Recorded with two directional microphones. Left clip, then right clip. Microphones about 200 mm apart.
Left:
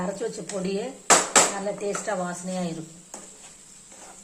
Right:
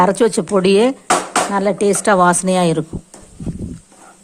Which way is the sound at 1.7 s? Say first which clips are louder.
Right 15 dB; 55° right (ahead or behind).